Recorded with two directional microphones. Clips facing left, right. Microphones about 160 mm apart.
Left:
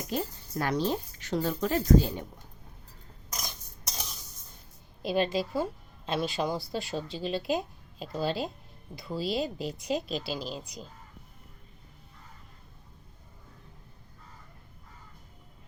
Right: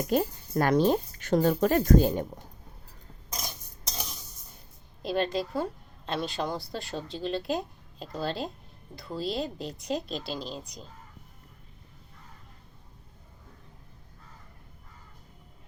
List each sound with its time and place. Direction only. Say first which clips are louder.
0.1 s speech: right 5 dB; 50° right (ahead or behind)
3.3 s a sound: right 1 dB; 25° right (ahead or behind)
5.0 s a woman's voice: left 1 dB; 5° left (ahead or behind)